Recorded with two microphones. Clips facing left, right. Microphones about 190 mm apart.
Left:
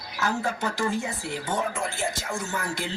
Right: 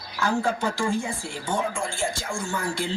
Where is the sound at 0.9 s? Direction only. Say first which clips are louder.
Right 1 dB; 20° left (ahead or behind).